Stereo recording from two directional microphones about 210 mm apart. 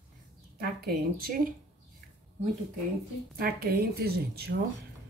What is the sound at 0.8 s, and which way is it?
Speech, 45° right (ahead or behind).